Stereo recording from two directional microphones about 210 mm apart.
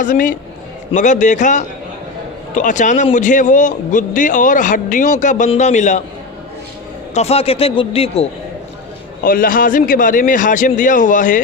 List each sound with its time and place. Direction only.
0.0 s a man's voice: 40° left (ahead or behind)
7.1 s a man's voice: 30° left (ahead or behind)
9.2 s a man's voice: 40° left (ahead or behind)